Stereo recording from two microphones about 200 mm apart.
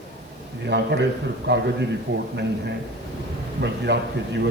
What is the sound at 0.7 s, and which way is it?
Speech, 60° right (ahead or behind).